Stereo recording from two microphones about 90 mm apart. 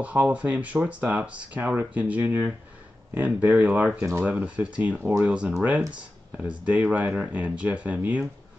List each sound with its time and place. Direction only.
0.0 s speech: 15° right (ahead or behind)